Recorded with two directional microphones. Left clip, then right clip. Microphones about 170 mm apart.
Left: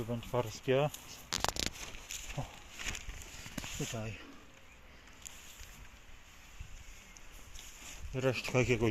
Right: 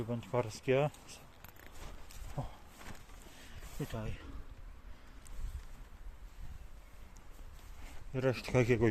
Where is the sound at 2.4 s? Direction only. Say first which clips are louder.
Right 4 dB; 15° left (ahead or behind).